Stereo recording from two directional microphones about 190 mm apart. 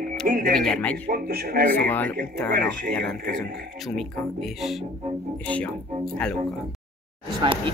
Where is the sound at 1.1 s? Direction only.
55° right (ahead or behind).